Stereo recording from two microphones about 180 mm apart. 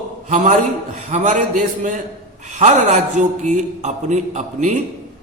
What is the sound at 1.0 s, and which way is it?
A man's voice, 40° right (ahead or behind).